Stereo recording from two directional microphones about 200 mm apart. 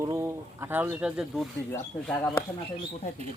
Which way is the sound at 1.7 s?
10° left (ahead or behind).